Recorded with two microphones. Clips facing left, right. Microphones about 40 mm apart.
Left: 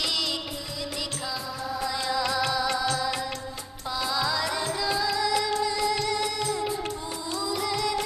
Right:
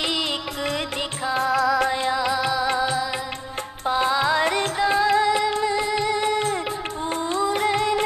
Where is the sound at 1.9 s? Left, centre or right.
Right.